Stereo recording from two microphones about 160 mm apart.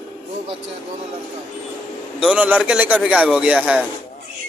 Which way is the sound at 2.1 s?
5° right (ahead or behind).